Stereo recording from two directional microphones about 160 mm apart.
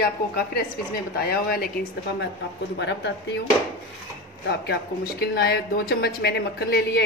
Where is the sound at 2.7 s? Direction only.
90° left.